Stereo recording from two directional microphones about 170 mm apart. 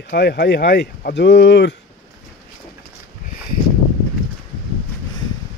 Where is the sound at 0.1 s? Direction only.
75° left (ahead or behind); by 1.8 s 90° left.